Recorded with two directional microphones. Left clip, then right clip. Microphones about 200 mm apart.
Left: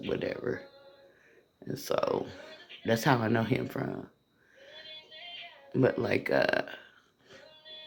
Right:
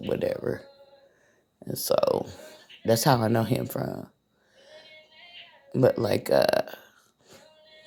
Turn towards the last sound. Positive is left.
turn(degrees=-50)  # may be behind; listen again after turning